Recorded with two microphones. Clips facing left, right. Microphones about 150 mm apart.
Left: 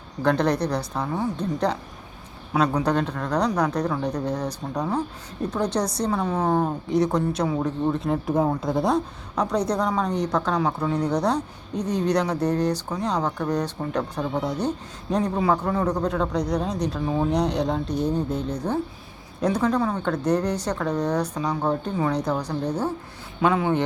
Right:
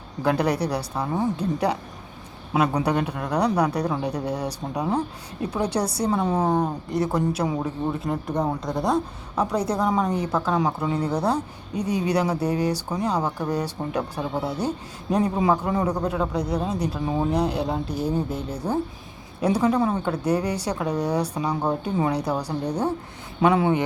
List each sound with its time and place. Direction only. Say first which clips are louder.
0.2 s speech: left 1 dB; 10° right (ahead or behind)
6.2 s speech: right 2 dB; 30° right (ahead or behind)
6.5 s speech: left 1 dB; centre (ahead or behind)